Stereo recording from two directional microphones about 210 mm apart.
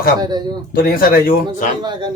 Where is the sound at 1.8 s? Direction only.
20° right (ahead or behind).